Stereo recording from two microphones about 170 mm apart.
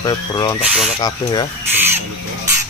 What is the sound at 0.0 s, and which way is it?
Speech, 25° left (ahead or behind).